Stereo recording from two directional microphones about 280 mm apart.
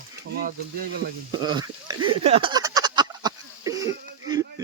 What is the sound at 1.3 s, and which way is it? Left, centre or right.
Speech, centre.